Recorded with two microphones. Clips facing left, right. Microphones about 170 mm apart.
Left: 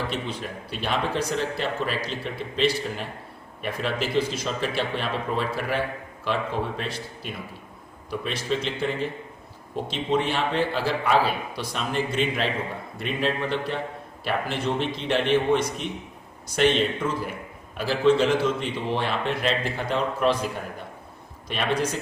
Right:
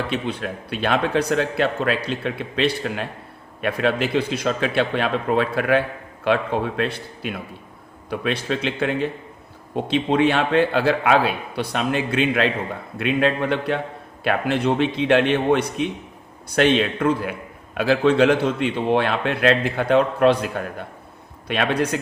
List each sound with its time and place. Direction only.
0.1 s a man's voice: 60° right (ahead or behind)
21.4 s a man's voice: 65° right (ahead or behind)